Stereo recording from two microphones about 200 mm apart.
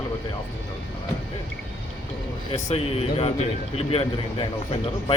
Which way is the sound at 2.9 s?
30° left (ahead or behind).